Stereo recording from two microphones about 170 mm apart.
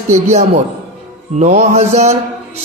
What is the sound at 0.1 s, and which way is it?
A man's voice, 45° right (ahead or behind).